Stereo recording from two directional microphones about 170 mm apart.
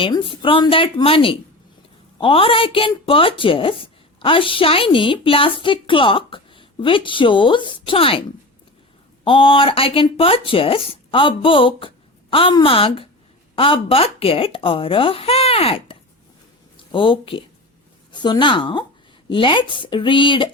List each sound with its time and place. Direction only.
0.0 s a woman's voice: 30° left (ahead or behind)
9.2 s a woman's voice: 30° left (ahead or behind)